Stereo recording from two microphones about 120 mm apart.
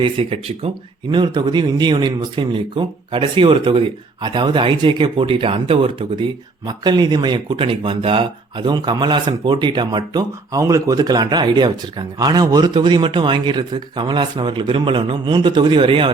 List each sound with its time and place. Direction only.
0.0 s speech: 55° right (ahead or behind)
1.1 s speech: 40° right (ahead or behind)